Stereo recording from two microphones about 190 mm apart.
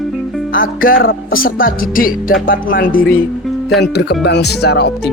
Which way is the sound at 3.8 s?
60° left (ahead or behind).